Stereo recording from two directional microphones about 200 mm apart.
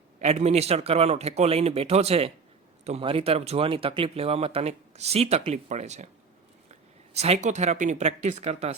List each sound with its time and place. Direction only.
0.2 s speech: 35° right (ahead or behind)